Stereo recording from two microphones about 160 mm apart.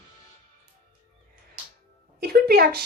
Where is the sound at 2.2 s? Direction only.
75° right (ahead or behind).